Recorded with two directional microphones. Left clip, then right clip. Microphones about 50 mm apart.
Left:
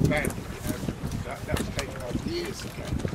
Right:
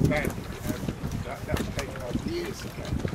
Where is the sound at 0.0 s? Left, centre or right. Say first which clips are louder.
Even; centre.